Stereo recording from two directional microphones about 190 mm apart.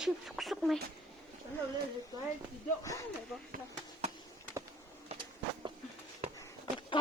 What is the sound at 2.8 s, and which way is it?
Speech, 15° left (ahead or behind).